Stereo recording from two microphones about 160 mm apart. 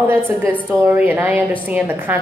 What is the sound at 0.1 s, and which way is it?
A woman's voice, 10° right (ahead or behind).